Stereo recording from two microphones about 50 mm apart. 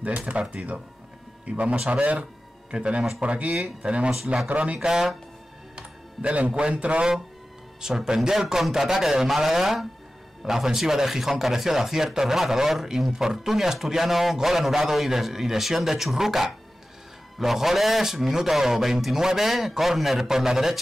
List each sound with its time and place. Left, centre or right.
0.4 s a man's voice: centre
4.7 s speech: centre
5.8 s music: centre
6.5 s speech: right